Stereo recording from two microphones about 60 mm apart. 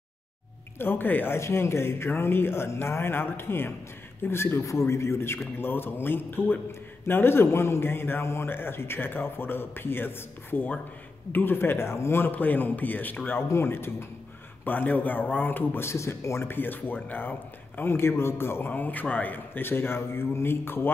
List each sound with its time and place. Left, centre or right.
0.7 s a man's voice: left
1.4 s speech: left
4.6 s a man's voice: left
13.5 s speech: left
14.6 s a man's voice: left
15.8 s speech: left
16.4 s a man's voice: left
18.7 s a man's voice: left